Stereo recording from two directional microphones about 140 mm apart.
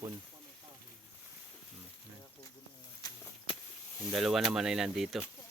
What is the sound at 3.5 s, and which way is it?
Snake, 40° left (ahead or behind).